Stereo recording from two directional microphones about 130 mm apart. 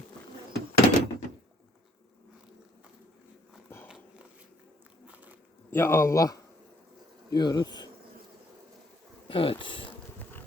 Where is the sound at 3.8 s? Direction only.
5° right (ahead or behind).